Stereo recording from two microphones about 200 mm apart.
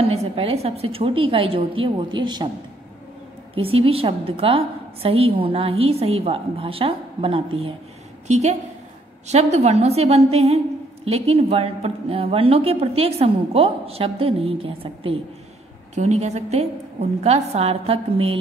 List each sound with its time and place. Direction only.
0.0 s a woman's voice: 30° right (ahead or behind)
3.5 s a woman's voice: 30° right (ahead or behind)